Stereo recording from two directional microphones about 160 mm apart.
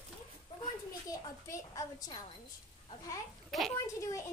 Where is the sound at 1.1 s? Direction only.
20° left (ahead or behind).